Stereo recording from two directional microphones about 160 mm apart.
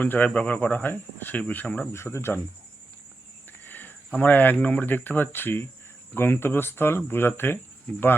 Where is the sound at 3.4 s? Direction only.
10° left (ahead or behind).